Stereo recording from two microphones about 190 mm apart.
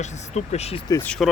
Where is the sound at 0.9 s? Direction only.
10° left (ahead or behind).